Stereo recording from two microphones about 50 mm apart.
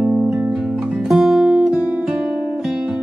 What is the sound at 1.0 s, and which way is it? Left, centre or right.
Music, centre.